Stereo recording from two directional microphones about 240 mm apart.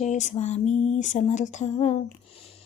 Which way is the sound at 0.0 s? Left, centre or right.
Left.